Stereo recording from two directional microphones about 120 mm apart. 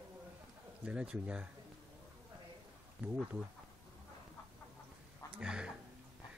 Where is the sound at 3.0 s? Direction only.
15° right (ahead or behind).